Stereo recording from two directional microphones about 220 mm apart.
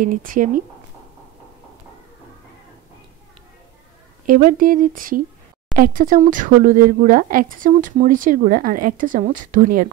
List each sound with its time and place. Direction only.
0.0 s speech: 40° right (ahead or behind)
4.3 s speech: 40° right (ahead or behind)